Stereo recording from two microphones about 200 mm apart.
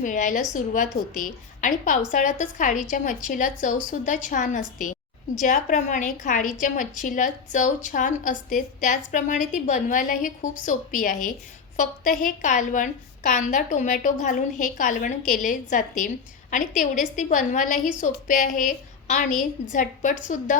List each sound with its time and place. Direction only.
0.0 s a woman's voice: 40° left (ahead or behind)